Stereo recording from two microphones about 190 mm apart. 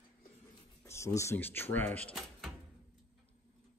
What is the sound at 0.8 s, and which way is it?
Speech, 15° left (ahead or behind).